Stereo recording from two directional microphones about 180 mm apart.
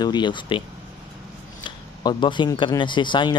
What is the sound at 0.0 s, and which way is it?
Speech, 25° left (ahead or behind).